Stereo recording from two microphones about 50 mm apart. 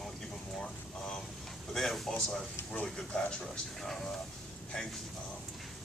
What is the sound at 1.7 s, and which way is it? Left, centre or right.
Speech, centre.